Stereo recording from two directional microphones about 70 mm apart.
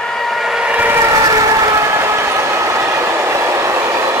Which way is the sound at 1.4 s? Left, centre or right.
Right.